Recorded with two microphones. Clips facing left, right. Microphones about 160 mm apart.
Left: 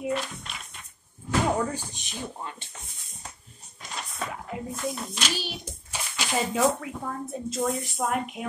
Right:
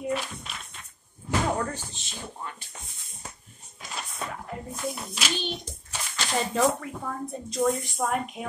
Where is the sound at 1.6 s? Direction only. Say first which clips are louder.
Left 2 dB; 10° left (ahead or behind).